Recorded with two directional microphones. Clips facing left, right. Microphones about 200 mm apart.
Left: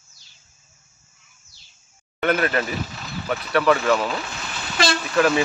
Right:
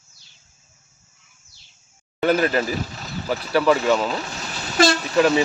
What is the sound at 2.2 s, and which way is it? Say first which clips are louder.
Speech: right 2 dB; 30° right (ahead or behind).